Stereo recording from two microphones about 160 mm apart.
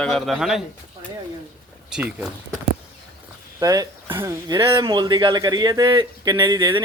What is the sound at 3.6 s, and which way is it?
Speech, 20° right (ahead or behind).